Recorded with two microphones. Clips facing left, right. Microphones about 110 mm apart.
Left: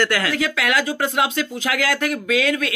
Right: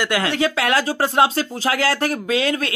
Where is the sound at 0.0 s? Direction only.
25° right (ahead or behind).